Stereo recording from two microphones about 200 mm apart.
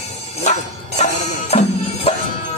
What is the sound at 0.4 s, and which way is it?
Music, 35° left (ahead or behind).